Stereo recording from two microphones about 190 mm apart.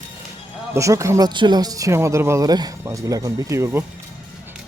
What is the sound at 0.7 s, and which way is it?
Speech, 15° right (ahead or behind).